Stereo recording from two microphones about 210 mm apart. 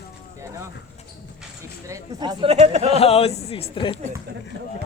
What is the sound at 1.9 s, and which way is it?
Speech, 20° right (ahead or behind).